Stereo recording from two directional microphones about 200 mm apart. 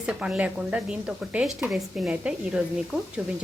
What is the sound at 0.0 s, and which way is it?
Speech, 5° right (ahead or behind).